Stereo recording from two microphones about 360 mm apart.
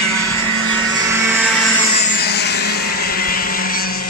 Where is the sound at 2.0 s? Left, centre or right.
Left.